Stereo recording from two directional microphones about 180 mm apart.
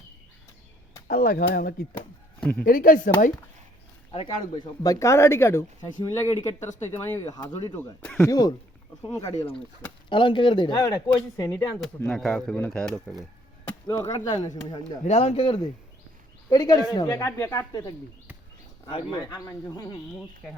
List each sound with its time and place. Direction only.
1.0 s speech: 55° left (ahead or behind)
2.4 s speech: 10° left (ahead or behind)
2.6 s speech: 50° left (ahead or behind)
4.1 s speech: 30° left (ahead or behind)
10.1 s speech: 25° left (ahead or behind)
10.8 s speech: 15° left (ahead or behind)
11.9 s speech: 5° left (ahead or behind)
13.7 s speech: 15° left (ahead or behind)
15.0 s speech: 35° left (ahead or behind); by 20.0 s 20° left (ahead or behind)